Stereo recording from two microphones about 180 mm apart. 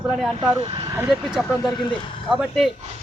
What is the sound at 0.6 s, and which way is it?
Speech, 30° right (ahead or behind).